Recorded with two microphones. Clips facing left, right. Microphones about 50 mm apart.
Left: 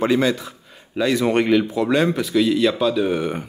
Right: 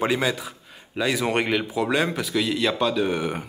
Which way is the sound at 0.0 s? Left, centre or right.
Centre.